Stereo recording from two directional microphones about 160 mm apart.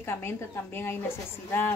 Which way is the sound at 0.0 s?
15° left (ahead or behind).